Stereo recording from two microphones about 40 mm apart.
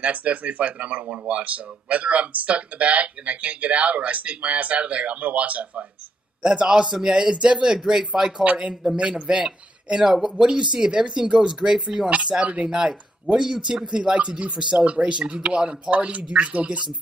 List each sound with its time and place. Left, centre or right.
0.0 s speech: right
6.9 s a man's voice: centre
8.5 s speech: right
10.0 s a man's voice: centre
10.3 s speech: right
12.1 s speech: right
12.7 s speech: centre